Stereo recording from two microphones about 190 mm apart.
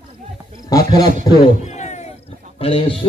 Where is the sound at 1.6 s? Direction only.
35° left (ahead or behind).